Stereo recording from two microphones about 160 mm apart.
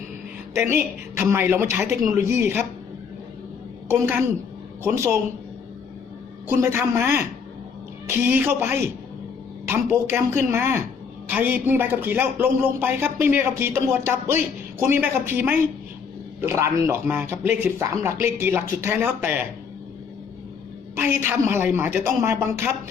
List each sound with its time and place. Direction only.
0.5 s a man's voice: 15° right (ahead or behind)
3.8 s a man's voice: 15° right (ahead or behind)
6.5 s a man's voice: 15° right (ahead or behind)
20.9 s a man's voice: 15° right (ahead or behind)